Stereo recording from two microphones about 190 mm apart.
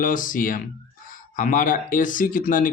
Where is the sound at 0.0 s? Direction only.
45° left (ahead or behind).